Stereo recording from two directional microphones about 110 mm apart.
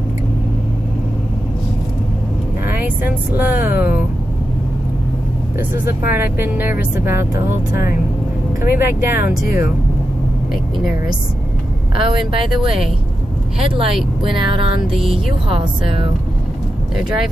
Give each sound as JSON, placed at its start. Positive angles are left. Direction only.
{"t": 2.6, "sound": "speech", "side_deg": -15}
{"t": 5.6, "sound": "speech", "side_deg": -20}
{"t": 12.0, "sound": "speech", "side_deg": -50}